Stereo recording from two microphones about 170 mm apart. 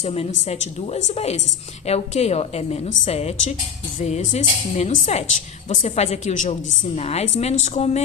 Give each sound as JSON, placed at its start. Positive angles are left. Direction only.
{"t": 0.0, "sound": "a woman's voice", "side_deg": 40}